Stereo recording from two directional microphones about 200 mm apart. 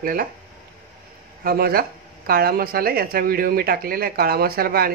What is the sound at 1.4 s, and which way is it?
Speech, 50° right (ahead or behind).